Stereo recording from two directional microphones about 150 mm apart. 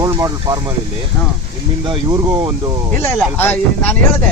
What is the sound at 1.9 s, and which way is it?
Speech, 30° right (ahead or behind).